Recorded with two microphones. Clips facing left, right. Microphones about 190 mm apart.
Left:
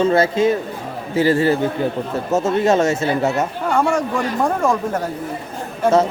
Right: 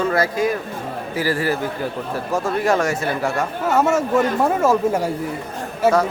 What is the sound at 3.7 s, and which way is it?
Speech, 5° right (ahead or behind).